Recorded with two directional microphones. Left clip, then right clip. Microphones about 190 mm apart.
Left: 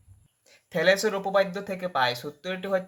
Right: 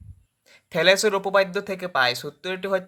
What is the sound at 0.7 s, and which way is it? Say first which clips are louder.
Speech: right 4 dB; 35° right (ahead or behind).